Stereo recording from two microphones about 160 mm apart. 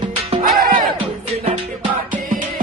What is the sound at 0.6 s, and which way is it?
Music, 65° right (ahead or behind).